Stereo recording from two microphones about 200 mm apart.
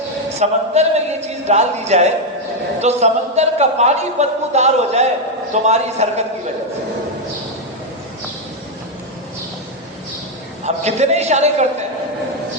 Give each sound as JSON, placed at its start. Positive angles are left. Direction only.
{"t": 0.3, "sound": "a man's voice", "side_deg": -35}
{"t": 10.8, "sound": "a man's voice", "side_deg": -35}